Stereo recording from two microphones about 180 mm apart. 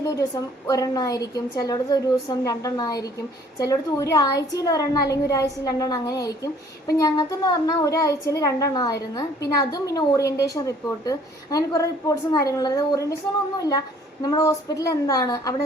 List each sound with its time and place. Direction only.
0.0 s a woman's voice: 20° left (ahead or behind)